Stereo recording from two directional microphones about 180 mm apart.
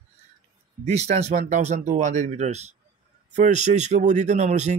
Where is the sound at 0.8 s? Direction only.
40° right (ahead or behind).